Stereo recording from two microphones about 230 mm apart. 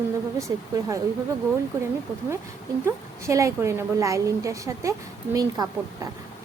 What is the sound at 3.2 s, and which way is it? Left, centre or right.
A woman's voice, centre.